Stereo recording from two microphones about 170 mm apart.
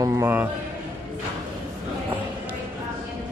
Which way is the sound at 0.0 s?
15° right (ahead or behind).